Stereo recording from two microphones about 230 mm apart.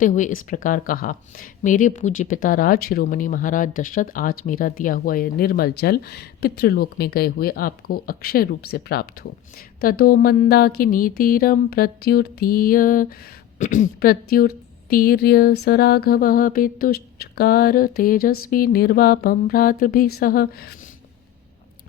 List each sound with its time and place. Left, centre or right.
0.0 s speech: left